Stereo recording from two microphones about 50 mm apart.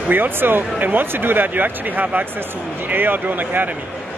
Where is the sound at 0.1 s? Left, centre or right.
Right.